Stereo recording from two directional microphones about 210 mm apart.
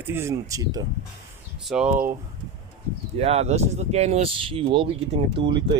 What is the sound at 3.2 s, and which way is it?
Speech, 30° right (ahead or behind).